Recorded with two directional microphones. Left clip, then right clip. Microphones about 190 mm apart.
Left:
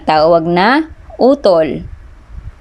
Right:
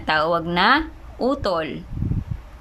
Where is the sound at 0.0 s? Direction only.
25° left (ahead or behind).